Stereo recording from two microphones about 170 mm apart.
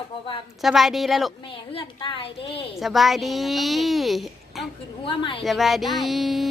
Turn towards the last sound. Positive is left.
turn(degrees=0)  # may be behind; listen again after turning